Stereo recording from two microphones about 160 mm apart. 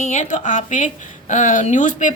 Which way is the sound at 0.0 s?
50° left (ahead or behind).